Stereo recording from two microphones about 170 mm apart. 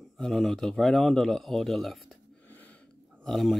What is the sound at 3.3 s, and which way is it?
Speech, centre (ahead or behind).